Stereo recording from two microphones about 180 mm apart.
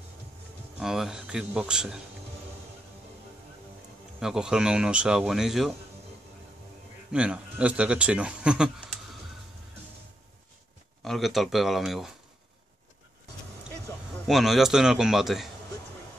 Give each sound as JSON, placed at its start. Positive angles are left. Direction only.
{"t": 0.7, "sound": "speech", "side_deg": 0}
{"t": 4.2, "sound": "speech", "side_deg": -5}
{"t": 7.1, "sound": "speech", "side_deg": -5}
{"t": 11.0, "sound": "speech", "side_deg": 0}
{"t": 14.2, "sound": "speech", "side_deg": 0}